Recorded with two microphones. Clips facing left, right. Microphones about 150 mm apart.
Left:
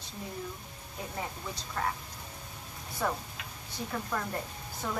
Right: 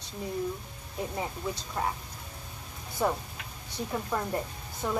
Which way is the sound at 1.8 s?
20° right (ahead or behind).